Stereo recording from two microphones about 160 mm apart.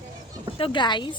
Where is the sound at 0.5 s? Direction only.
30° left (ahead or behind).